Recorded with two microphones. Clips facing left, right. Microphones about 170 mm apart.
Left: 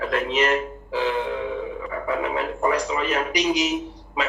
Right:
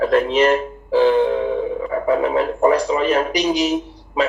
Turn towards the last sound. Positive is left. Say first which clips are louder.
# right 6 dB
turn(degrees=-35)  # may be behind; listen again after turning